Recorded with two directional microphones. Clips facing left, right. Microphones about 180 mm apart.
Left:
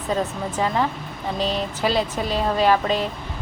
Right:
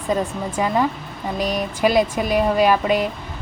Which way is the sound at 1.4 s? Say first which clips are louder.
Right 2 dB; 15° right (ahead or behind).